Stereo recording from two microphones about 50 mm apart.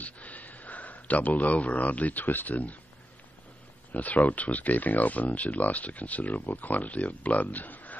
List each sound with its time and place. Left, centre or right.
0.0 s speech: left
3.9 s speech: left